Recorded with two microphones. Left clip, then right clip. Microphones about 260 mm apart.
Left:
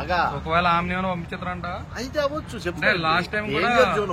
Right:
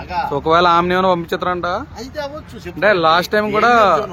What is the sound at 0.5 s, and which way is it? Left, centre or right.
Speech, right.